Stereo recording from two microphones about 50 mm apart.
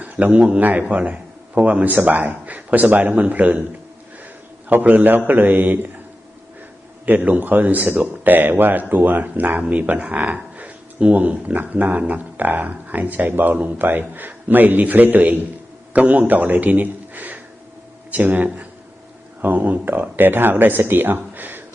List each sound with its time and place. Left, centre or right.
0.0 s a sound: right
0.6 s speech: right
4.7 s speech: right
7.2 s a man's voice: right